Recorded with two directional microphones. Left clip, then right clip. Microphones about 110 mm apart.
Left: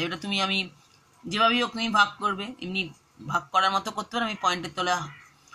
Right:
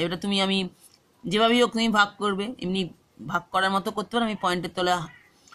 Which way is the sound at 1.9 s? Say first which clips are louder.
Left 3 dB; 55° right (ahead or behind).